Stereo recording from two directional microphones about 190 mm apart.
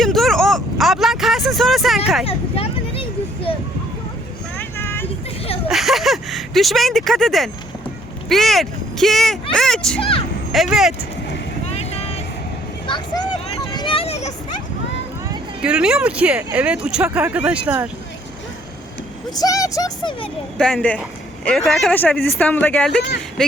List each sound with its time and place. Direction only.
0.0 s a sound: centre (ahead or behind)
2.2 s a sound: 30° left (ahead or behind)
4.5 s vehicle: 10° left (ahead or behind)
5.6 s a sound: centre (ahead or behind)
8.3 s speech: centre (ahead or behind)
10.0 s speech: 30° left (ahead or behind)
10.5 s speech: centre (ahead or behind)
11.7 s vehicle: 35° left (ahead or behind)
13.7 s a sound: 25° left (ahead or behind)
15.6 s speech: 5° right (ahead or behind)
19.4 s speech: 15° left (ahead or behind)
20.6 s speech: 5° left (ahead or behind)